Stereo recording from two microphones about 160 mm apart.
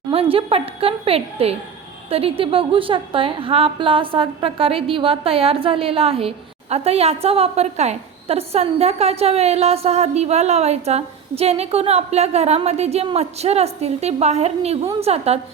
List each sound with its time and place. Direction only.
0.1 s a woman's voice: 35° right (ahead or behind)